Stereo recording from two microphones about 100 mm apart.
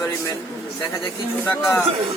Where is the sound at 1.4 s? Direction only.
20° left (ahead or behind).